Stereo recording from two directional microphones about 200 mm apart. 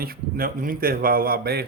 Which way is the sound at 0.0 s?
50° right (ahead or behind).